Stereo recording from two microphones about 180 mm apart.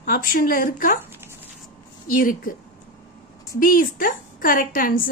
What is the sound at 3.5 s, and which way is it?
A woman's voice, 50° left (ahead or behind).